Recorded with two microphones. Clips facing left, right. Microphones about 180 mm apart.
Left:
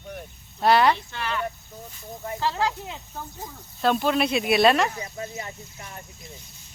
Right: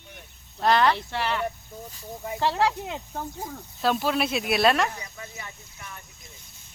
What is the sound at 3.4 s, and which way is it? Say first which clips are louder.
Speech: left 3 dB; 5° right (ahead or behind).